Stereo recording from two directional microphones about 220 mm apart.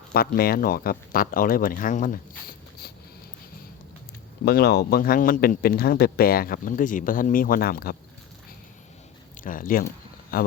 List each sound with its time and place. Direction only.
0.1 s speech: 45° left (ahead or behind)
4.4 s speech: 45° left (ahead or behind)
9.4 s speech: 40° left (ahead or behind)